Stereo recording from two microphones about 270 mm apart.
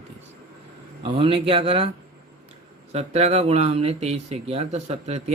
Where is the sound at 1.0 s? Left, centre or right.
Centre.